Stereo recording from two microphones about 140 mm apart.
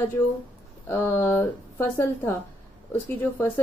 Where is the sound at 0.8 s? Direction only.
15° left (ahead or behind).